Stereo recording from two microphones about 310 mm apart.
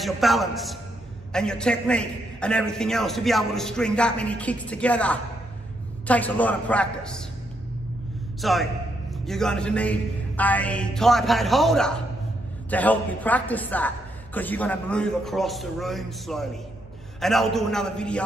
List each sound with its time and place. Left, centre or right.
0.0 s a man's voice: centre
8.4 s a man's voice: centre